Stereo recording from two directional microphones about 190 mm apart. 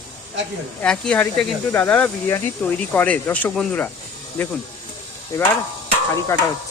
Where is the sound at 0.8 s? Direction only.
5° left (ahead or behind).